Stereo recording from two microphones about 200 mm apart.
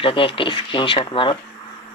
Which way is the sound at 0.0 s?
25° left (ahead or behind).